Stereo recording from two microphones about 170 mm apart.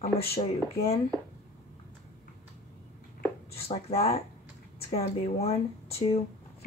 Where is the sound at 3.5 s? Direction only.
35° left (ahead or behind).